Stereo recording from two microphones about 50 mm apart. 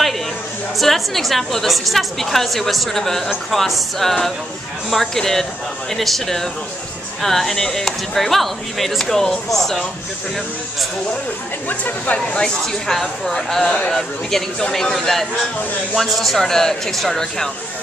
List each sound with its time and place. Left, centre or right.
0.7 s speech: centre
12.3 s speech: centre
12.8 s speech: centre